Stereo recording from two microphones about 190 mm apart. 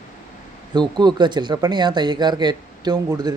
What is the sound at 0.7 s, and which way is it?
Speech, 25° right (ahead or behind).